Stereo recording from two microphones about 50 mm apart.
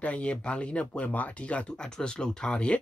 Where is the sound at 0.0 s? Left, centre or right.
Left.